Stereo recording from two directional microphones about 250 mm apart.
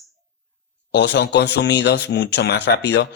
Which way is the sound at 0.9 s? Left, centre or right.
Left.